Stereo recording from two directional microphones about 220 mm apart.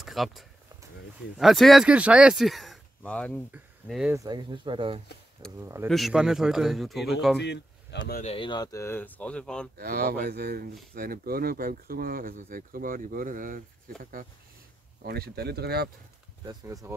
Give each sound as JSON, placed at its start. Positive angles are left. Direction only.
{"t": 0.0, "sound": "speech", "side_deg": 0}
{"t": 4.1, "sound": "speech", "side_deg": -15}
{"t": 5.6, "sound": "speech", "side_deg": -15}
{"t": 5.9, "sound": "speech", "side_deg": 0}
{"t": 7.4, "sound": "speech", "side_deg": 50}
{"t": 8.2, "sound": "speech", "side_deg": 25}
{"t": 9.8, "sound": "speech", "side_deg": -45}
{"t": 15.0, "sound": "speech", "side_deg": -45}
{"t": 16.4, "sound": "speech", "side_deg": -15}